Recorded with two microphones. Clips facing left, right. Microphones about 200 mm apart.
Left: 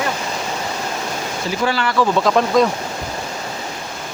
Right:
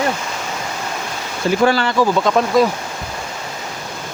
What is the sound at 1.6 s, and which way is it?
Speech, 45° right (ahead or behind).